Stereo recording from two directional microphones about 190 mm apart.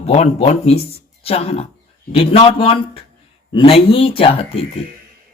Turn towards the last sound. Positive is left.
turn(degrees=30)  # may be behind; listen again after turning